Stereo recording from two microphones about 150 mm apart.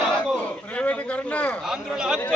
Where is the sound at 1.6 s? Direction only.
5° right (ahead or behind).